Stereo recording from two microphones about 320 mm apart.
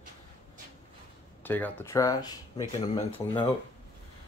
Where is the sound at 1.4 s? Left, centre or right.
Centre.